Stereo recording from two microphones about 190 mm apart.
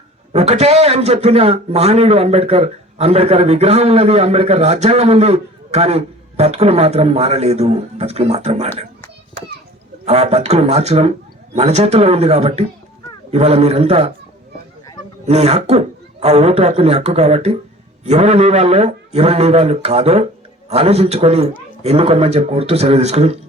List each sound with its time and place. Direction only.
0.3 s a man's voice: 35° right (ahead or behind)
10.1 s a man's voice: 35° right (ahead or behind)
15.3 s a man's voice: 35° right (ahead or behind)